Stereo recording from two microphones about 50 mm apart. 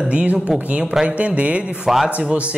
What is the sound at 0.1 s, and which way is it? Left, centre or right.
Speech, right.